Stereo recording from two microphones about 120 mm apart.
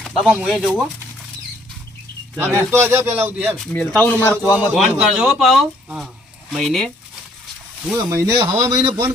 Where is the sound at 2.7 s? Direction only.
20° right (ahead or behind).